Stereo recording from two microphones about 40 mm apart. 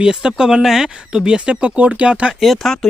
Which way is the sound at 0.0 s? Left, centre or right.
Centre.